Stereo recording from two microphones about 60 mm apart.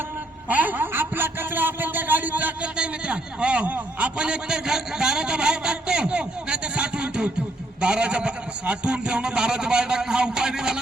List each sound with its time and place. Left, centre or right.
0.4 s a man's voice: right; by 10.8 s centre